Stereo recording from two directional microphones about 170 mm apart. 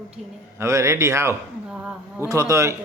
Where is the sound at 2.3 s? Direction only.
20° right (ahead or behind).